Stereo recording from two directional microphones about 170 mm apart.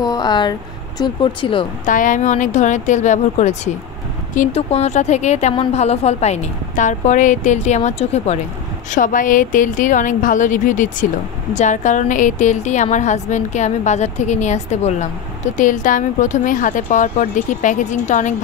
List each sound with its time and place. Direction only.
0.0 s speech: 25° left (ahead or behind)
1.9 s a woman's voice: 50° left (ahead or behind)
8.9 s a woman's voice: 50° left (ahead or behind)